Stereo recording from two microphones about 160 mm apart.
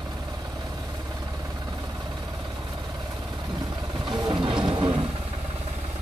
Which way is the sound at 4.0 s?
30° right (ahead or behind).